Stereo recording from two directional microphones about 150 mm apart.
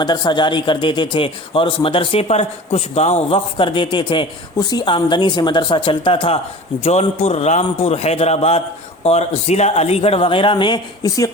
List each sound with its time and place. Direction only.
0.0 s a man's voice: 30° left (ahead or behind)